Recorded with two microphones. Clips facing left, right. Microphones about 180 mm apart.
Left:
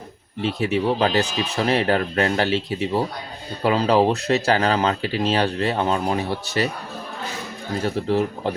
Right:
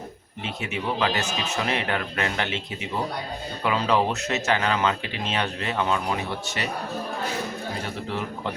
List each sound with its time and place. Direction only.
0.4 s speech: 35° left (ahead or behind)